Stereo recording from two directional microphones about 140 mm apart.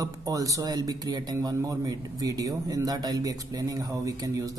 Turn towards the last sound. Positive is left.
turn(degrees=-25)  # may be behind; listen again after turning